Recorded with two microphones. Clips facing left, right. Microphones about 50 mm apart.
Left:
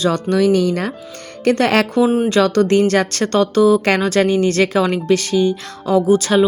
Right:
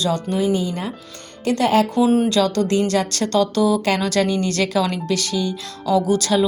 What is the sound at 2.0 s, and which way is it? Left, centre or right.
Speech, centre.